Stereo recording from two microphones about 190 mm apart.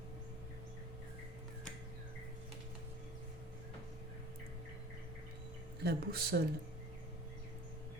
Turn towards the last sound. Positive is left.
turn(degrees=-55)  # may be behind; listen again after turning